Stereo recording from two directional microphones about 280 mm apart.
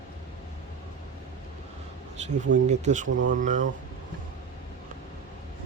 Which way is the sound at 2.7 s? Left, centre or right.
Right.